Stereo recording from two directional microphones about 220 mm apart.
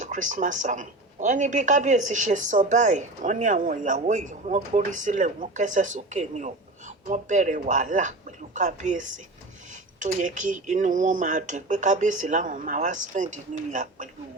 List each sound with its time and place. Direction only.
0.0 s speech: 35° right (ahead or behind)